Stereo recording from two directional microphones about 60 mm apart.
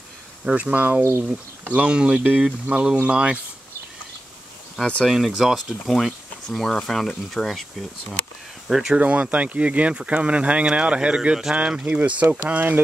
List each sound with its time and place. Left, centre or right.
0.5 s speech: right
5.0 s speech: centre
8.6 s speech: centre
8.9 s speech: right